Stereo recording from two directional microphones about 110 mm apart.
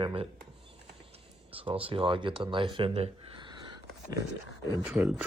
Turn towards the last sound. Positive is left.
turn(degrees=-5)  # may be behind; listen again after turning